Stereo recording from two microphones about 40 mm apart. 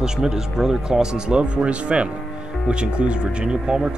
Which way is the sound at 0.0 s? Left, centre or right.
Centre.